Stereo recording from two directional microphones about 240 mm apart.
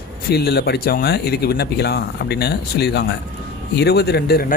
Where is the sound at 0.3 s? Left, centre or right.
Left.